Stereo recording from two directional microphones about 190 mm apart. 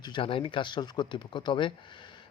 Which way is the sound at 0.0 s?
25° left (ahead or behind).